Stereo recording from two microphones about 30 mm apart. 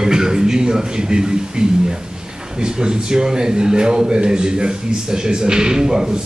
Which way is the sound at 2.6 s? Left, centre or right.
Right.